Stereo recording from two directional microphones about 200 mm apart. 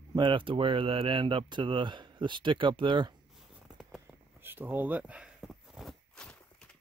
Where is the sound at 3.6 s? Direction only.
Centre (ahead or behind).